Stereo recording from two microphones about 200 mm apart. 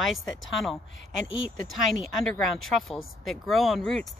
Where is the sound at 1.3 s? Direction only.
70° left (ahead or behind).